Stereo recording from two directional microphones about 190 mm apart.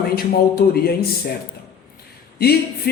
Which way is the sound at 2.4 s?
55° left (ahead or behind).